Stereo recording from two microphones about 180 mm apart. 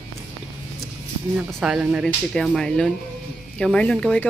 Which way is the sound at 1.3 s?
5° right (ahead or behind).